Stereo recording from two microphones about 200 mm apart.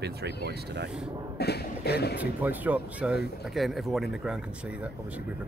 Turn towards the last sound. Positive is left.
turn(degrees=-5)  # may be behind; listen again after turning